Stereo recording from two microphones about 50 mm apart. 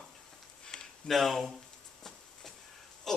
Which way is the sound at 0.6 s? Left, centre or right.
Centre.